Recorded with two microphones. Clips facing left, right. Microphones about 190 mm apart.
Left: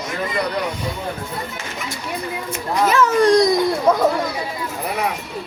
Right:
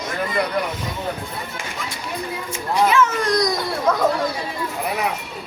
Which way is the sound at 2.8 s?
35° left (ahead or behind).